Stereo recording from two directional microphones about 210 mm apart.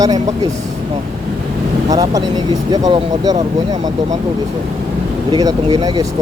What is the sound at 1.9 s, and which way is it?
Speech, 20° right (ahead or behind).